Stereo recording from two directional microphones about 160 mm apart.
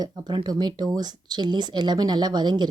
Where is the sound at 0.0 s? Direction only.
25° right (ahead or behind).